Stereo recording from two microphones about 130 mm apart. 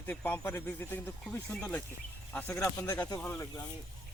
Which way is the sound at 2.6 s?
25° left (ahead or behind).